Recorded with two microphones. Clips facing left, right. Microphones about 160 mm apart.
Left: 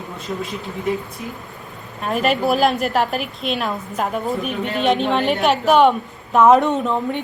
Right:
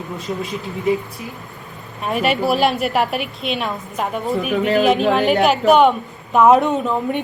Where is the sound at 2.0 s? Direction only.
5° right (ahead or behind).